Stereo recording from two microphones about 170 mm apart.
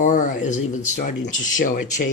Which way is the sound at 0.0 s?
50° left (ahead or behind).